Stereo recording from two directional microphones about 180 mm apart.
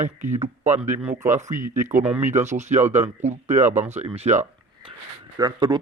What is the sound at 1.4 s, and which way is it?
Speech, 45° right (ahead or behind).